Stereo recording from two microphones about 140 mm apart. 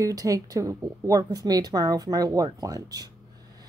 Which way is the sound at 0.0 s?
25° right (ahead or behind).